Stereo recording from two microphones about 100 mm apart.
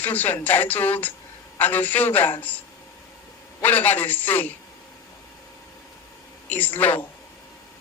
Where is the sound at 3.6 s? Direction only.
15° left (ahead or behind).